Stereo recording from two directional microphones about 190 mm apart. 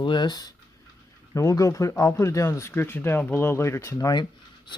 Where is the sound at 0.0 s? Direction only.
25° left (ahead or behind).